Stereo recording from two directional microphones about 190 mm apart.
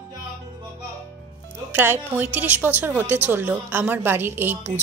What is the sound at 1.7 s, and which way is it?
A woman's voice, 10° right (ahead or behind).